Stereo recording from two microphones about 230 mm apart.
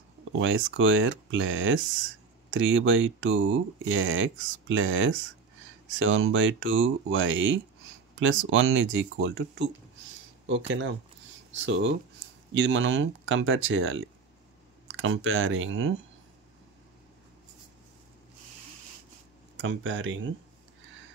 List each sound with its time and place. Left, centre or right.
0.4 s speech: right
11.6 s speech: right
19.5 s speech: right